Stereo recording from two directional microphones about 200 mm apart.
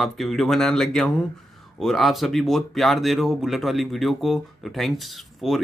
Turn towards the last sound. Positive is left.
turn(degrees=0)  # may be behind; listen again after turning